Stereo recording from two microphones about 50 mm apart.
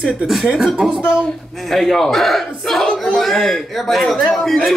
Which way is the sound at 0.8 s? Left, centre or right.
Right.